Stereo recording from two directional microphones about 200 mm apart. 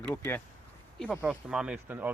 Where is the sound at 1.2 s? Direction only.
5° right (ahead or behind).